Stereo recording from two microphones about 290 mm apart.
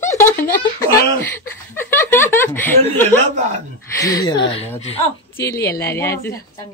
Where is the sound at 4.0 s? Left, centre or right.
Centre.